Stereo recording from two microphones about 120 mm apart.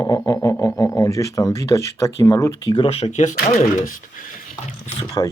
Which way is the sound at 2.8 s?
55° left (ahead or behind).